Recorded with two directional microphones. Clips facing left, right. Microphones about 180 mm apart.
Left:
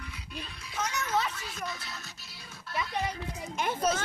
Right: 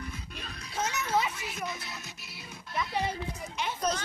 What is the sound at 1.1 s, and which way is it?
Music, 20° right (ahead or behind).